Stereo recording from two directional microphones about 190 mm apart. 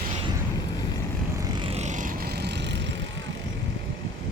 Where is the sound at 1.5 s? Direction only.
35° right (ahead or behind).